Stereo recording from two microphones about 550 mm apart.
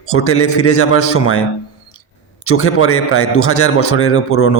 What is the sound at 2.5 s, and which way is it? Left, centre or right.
Speech, left.